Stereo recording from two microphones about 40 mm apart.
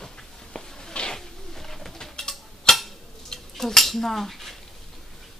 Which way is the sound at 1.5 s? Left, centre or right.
Centre.